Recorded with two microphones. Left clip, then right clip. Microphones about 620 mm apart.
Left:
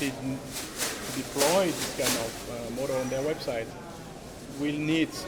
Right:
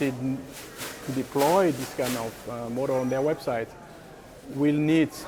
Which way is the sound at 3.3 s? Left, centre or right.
Right.